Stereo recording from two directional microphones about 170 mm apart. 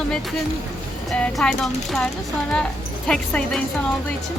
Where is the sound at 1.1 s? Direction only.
5° left (ahead or behind).